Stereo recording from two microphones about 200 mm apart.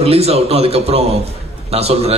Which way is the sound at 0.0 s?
30° right (ahead or behind).